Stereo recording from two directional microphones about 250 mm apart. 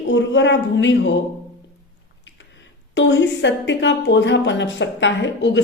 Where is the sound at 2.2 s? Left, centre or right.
Left.